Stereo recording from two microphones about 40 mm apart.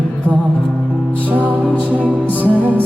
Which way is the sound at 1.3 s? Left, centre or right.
Right.